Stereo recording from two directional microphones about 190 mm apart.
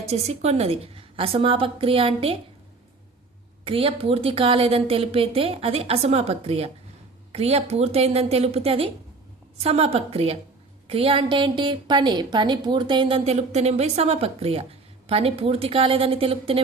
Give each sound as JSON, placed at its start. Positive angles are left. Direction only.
{"t": 0.0, "sound": "a woman's voice", "side_deg": -35}
{"t": 3.6, "sound": "a woman's voice", "side_deg": -30}